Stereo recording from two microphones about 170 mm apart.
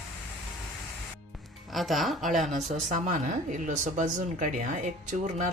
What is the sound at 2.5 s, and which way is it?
Speech, 45° right (ahead or behind).